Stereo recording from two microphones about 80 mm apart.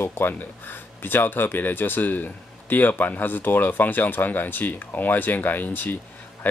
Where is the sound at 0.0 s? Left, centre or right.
Left.